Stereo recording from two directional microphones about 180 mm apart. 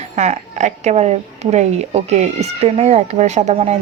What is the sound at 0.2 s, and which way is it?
Speech, 40° right (ahead or behind).